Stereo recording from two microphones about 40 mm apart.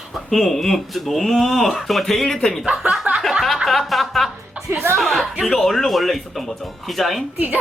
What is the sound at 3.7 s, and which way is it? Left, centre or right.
Speech, centre.